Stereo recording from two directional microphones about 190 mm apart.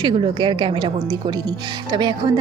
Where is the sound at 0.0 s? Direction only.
25° right (ahead or behind).